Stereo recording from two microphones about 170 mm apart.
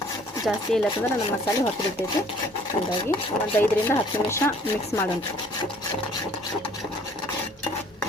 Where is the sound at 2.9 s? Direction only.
30° left (ahead or behind).